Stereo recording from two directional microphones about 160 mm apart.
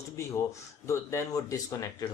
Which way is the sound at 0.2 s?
15° left (ahead or behind).